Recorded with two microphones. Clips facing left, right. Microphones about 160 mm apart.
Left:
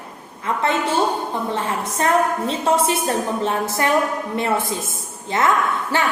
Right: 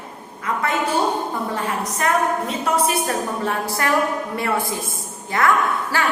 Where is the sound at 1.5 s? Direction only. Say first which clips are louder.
Left 1 dB; 25° left (ahead or behind).